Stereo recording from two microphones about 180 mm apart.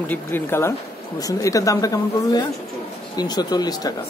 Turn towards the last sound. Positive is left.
turn(degrees=20)  # may be behind; listen again after turning